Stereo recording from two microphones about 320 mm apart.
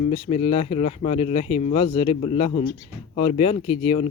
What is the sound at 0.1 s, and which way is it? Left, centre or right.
Speech, centre.